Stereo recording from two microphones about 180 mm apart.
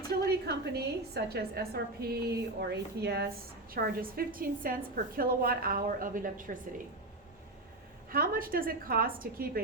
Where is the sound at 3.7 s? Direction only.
55° right (ahead or behind).